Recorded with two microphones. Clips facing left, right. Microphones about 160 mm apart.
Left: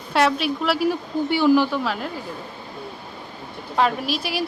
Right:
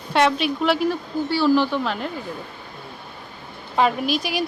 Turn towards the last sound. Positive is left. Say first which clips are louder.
# right 2 dB
turn(degrees=0)  # may be behind; listen again after turning